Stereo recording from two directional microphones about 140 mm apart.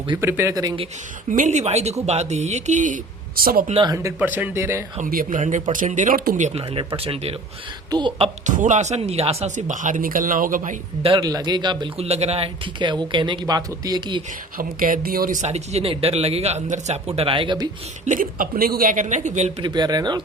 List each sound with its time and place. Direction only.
0.2 s speech: 20° right (ahead or behind)
1.3 s speech: 60° right (ahead or behind)
3.8 s speech: 20° right (ahead or behind)
4.2 s speech: 10° right (ahead or behind)
5.0 s speech: 80° right
6.5 s speech: 45° right (ahead or behind)
7.9 s speech: 35° right (ahead or behind)
8.4 s speech: 65° right (ahead or behind)
11.0 s speech: 35° right (ahead or behind)
11.9 s speech: 50° right (ahead or behind)
12.8 s speech: 35° right (ahead or behind)
14.6 s speech: 75° right (ahead or behind); by 17.7 s 35° right (ahead or behind)
18.0 s speech: 70° right (ahead or behind)
19.6 s speech: 30° right (ahead or behind)